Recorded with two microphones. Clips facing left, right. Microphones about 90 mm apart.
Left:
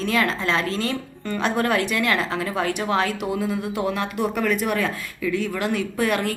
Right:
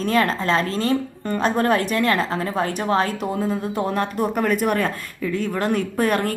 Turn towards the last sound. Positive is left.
turn(degrees=-40)  # may be behind; listen again after turning